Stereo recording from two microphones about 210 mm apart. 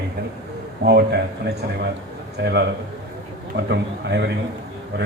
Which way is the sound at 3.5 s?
55° right (ahead or behind).